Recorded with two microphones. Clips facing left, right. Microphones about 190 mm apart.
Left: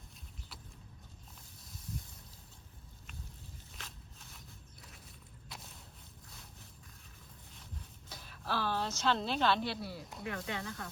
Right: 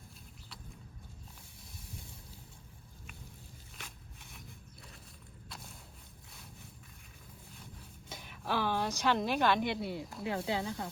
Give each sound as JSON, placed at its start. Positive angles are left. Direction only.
{"t": 3.8, "sound": "a sound", "side_deg": -10}
{"t": 5.5, "sound": "walk", "side_deg": 0}
{"t": 8.1, "sound": "speech", "side_deg": -15}